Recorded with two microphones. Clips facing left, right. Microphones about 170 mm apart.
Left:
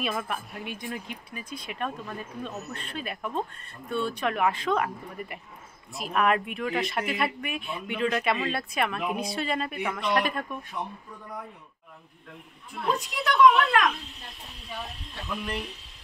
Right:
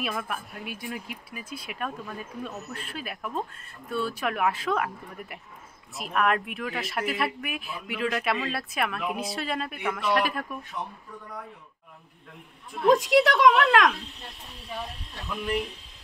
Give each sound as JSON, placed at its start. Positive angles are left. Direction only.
{"t": 0.0, "sound": "speech", "side_deg": 0}
{"t": 12.8, "sound": "a woman's voice", "side_deg": -90}